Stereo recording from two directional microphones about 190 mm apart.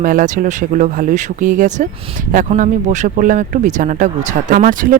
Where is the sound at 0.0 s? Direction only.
45° right (ahead or behind).